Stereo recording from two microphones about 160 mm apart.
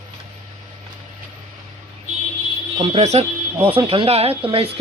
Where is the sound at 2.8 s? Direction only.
40° right (ahead or behind).